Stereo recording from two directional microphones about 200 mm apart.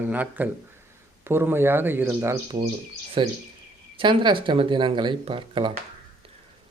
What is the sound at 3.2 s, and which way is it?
Speech, 25° right (ahead or behind).